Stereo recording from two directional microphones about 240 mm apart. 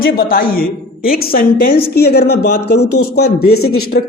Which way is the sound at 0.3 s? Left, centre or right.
Left.